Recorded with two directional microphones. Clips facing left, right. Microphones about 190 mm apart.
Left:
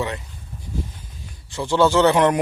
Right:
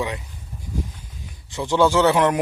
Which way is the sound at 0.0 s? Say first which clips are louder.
Even; 10° right (ahead or behind).